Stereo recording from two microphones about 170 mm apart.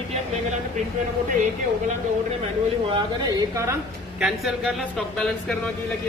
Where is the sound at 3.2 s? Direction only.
20° right (ahead or behind).